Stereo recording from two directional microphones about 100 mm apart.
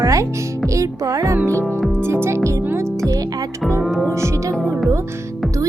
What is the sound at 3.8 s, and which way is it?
Speech, centre (ahead or behind).